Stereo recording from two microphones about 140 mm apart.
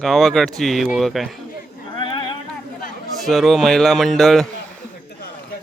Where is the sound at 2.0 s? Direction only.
35° left (ahead or behind).